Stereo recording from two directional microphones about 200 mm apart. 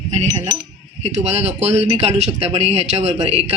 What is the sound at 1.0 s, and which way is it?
Speech, 35° right (ahead or behind).